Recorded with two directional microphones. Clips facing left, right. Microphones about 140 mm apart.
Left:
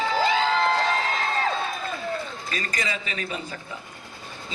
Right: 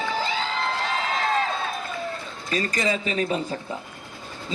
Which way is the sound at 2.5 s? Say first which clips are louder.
Right 7 dB; 35° right (ahead or behind).